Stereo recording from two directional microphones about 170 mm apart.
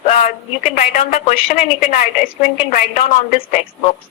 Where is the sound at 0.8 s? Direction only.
40° left (ahead or behind).